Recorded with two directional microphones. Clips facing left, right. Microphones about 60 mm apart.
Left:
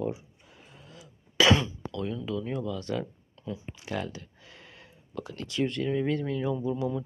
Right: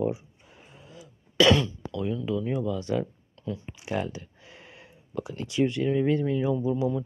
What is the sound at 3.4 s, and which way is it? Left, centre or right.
Speech, centre.